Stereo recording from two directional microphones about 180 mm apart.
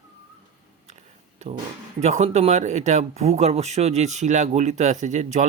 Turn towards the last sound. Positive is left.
turn(degrees=-40)  # may be behind; listen again after turning